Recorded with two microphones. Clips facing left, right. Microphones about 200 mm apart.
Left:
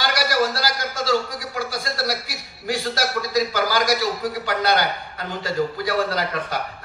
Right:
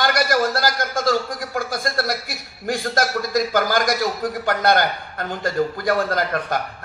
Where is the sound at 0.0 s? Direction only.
50° right (ahead or behind).